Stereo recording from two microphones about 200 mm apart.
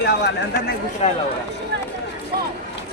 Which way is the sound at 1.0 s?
30° left (ahead or behind).